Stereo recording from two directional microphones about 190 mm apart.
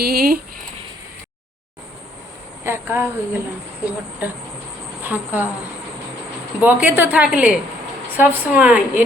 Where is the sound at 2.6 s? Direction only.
10° right (ahead or behind).